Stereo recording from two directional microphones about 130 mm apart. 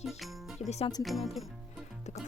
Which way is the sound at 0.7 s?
55° left (ahead or behind).